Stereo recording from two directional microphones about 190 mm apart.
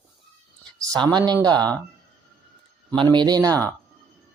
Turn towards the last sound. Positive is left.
turn(degrees=-20)  # may be behind; listen again after turning